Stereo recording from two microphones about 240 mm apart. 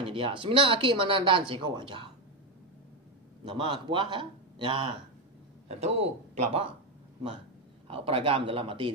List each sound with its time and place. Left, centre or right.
0.0 s a man's voice: right
3.4 s a man's voice: right
7.9 s a man's voice: right